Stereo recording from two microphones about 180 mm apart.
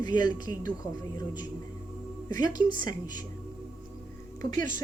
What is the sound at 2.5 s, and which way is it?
Speech, 25° left (ahead or behind).